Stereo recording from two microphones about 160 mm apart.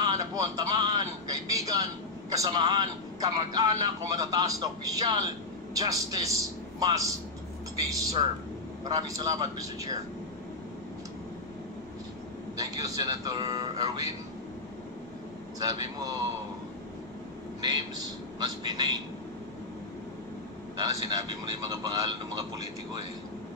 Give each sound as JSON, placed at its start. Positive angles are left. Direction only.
{"t": 0.0, "sound": "a man's voice", "side_deg": -25}
{"t": 12.5, "sound": "a man's voice", "side_deg": -25}
{"t": 15.6, "sound": "a man's voice", "side_deg": -25}
{"t": 17.6, "sound": "a man's voice", "side_deg": -30}
{"t": 20.7, "sound": "a man's voice", "side_deg": -25}